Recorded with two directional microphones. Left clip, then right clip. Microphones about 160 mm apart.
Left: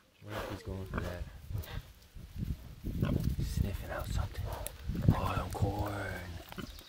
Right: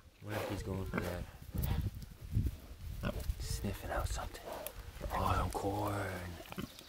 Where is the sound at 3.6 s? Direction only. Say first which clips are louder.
Right 2 dB; 5° right (ahead or behind).